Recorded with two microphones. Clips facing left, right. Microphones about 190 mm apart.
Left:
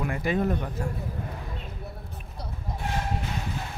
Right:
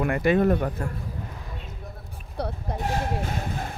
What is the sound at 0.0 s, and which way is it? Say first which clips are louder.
Speech: right 6 dB; 65° right (ahead or behind).